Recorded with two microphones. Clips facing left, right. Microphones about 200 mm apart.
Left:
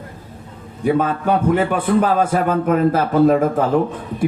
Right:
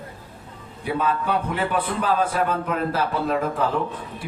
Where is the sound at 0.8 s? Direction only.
50° left (ahead or behind).